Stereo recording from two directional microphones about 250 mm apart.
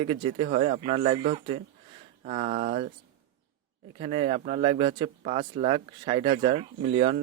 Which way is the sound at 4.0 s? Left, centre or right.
Right.